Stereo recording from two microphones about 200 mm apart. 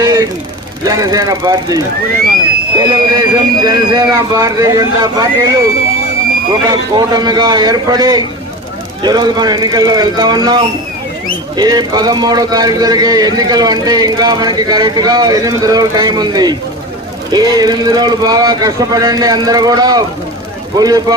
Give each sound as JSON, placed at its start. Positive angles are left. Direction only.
{"t": 0.0, "sound": "vehicle", "side_deg": -20}
{"t": 0.9, "sound": "a man's voice", "side_deg": -15}
{"t": 6.7, "sound": "a man's voice", "side_deg": -20}